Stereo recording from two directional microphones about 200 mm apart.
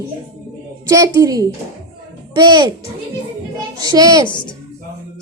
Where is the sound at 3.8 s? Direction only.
20° right (ahead or behind).